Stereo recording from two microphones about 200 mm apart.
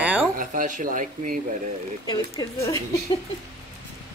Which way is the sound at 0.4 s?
40° right (ahead or behind).